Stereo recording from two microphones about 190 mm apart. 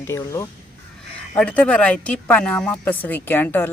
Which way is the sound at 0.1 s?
15° left (ahead or behind).